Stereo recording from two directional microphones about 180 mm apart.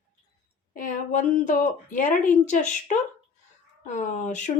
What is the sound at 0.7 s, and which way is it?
Speech, 50° left (ahead or behind).